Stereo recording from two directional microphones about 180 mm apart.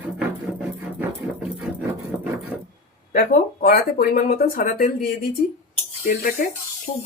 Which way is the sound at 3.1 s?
55° left (ahead or behind).